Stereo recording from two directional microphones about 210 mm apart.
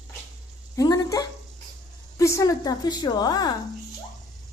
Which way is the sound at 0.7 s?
15° left (ahead or behind).